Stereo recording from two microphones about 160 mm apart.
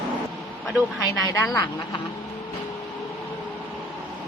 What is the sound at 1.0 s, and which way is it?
Speech, 20° left (ahead or behind).